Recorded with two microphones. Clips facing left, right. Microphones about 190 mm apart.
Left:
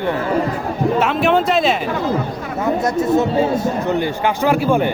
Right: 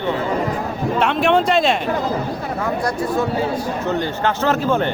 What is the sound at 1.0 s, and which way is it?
Speech, centre (ahead or behind).